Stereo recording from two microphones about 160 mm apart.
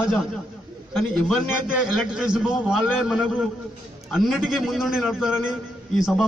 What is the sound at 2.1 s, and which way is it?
A man's voice, 5° right (ahead or behind).